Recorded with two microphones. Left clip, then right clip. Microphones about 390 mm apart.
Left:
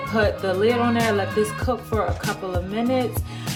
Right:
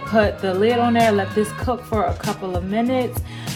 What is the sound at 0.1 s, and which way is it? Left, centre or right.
Speech, centre.